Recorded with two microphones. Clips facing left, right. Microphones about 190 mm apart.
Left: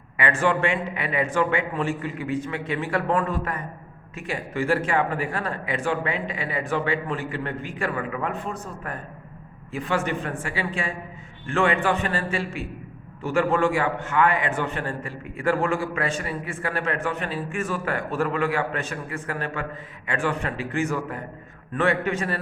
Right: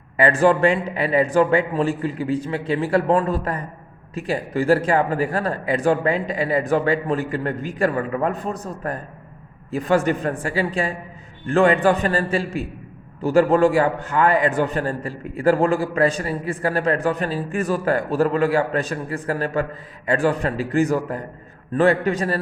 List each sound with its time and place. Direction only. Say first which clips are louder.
0.2 s a man's voice: right 7 dB; 35° right (ahead or behind)